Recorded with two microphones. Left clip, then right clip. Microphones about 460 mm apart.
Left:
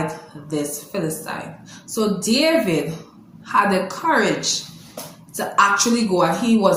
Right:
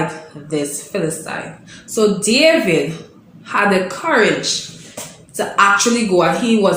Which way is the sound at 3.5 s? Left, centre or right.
Left.